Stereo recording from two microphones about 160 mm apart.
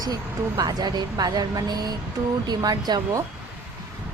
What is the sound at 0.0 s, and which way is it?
A woman's voice, 25° right (ahead or behind).